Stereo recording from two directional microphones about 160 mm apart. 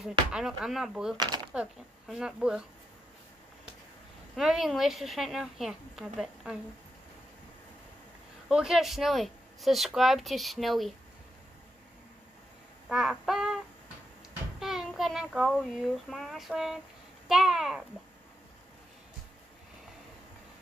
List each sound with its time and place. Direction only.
0.0 s speech: 5° right (ahead or behind)
1.1 s speech: 25° right (ahead or behind)
1.5 s speech: 5° right (ahead or behind)
4.4 s speech: centre (ahead or behind)
8.5 s speech: 5° right (ahead or behind)
12.8 s speech: centre (ahead or behind)
14.6 s a child's voice: centre (ahead or behind)